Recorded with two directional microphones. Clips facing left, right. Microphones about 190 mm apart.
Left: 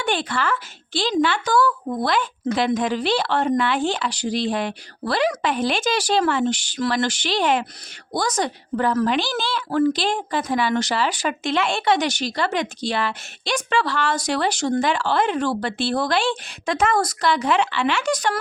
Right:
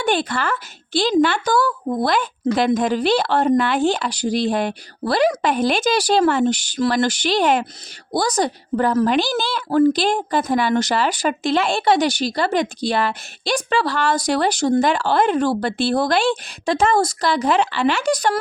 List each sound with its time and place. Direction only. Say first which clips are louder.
0.0 s a woman's voice: right 3 dB; 40° right (ahead or behind)